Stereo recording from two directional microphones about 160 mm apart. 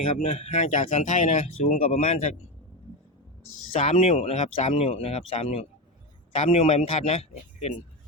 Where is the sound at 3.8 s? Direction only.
45° left (ahead or behind).